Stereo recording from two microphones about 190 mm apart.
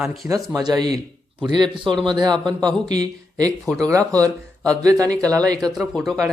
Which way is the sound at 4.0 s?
5° left (ahead or behind).